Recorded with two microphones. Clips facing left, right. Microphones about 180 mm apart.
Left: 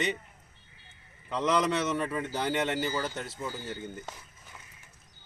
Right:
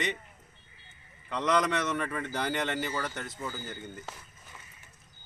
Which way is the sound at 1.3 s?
5° left (ahead or behind).